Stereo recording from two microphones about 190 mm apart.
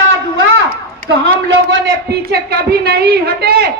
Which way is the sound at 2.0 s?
55° right (ahead or behind).